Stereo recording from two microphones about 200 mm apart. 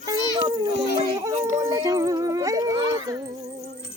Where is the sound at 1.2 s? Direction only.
15° right (ahead or behind).